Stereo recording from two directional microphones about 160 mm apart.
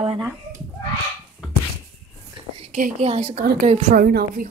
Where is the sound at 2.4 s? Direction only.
30° right (ahead or behind).